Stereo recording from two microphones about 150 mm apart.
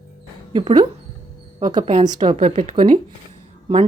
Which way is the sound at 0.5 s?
30° right (ahead or behind).